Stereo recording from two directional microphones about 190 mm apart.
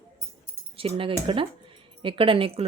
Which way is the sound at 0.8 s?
30° right (ahead or behind).